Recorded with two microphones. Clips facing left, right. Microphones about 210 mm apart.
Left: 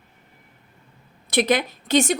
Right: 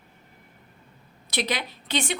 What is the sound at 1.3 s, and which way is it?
Speech, 50° left (ahead or behind).